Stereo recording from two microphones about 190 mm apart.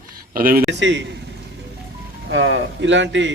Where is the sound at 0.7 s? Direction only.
70° right (ahead or behind).